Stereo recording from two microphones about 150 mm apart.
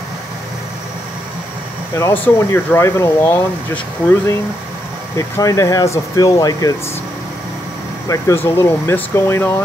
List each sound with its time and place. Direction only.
2.2 s speech: 15° left (ahead or behind)
8.1 s speech: 20° left (ahead or behind)